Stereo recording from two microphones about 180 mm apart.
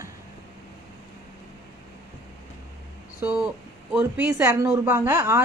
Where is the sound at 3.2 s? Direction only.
10° right (ahead or behind).